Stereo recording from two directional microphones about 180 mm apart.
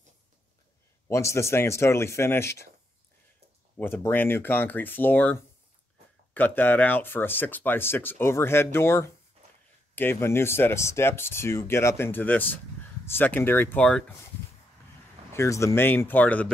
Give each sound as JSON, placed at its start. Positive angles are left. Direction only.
{"t": 1.0, "sound": "speech", "side_deg": 15}
{"t": 3.7, "sound": "speech", "side_deg": 10}
{"t": 9.4, "sound": "a sound", "side_deg": -35}
{"t": 9.9, "sound": "speech", "side_deg": 10}
{"t": 15.3, "sound": "speech", "side_deg": 15}